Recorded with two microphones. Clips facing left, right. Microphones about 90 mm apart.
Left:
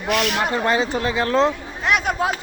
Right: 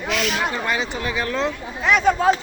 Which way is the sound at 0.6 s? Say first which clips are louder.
Left 4 dB; 35° left (ahead or behind).